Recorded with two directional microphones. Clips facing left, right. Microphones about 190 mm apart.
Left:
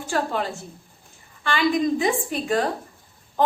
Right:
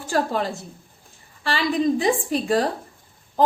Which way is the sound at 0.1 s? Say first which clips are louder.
Right 2 dB; 35° right (ahead or behind).